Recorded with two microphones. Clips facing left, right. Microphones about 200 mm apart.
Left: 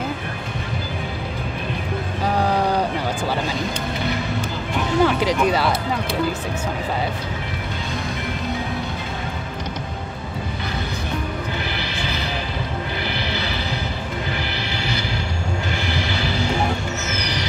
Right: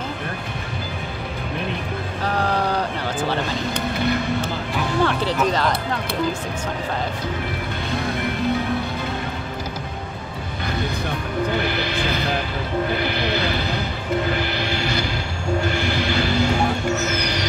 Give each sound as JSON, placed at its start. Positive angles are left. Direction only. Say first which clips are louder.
{"t": 2.2, "sound": "a sound", "louder": "left 2 dB", "side_deg": 10}
{"t": 5.0, "sound": "speech", "louder": "left 3 dB", "side_deg": 10}
{"t": 11.8, "sound": "music", "louder": "right 4 dB", "side_deg": -50}
{"t": 13.3, "sound": "music", "louder": "right 3 dB", "side_deg": -50}